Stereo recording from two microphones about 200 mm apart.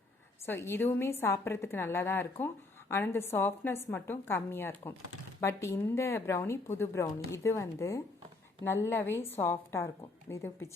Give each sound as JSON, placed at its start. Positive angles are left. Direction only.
{"t": 0.4, "sound": "a woman's voice", "side_deg": 10}